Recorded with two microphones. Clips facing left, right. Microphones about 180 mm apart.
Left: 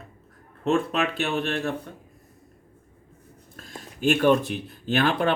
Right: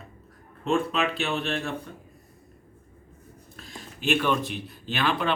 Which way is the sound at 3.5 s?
50° left (ahead or behind).